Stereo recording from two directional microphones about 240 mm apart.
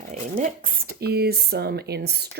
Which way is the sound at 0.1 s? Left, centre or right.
Right.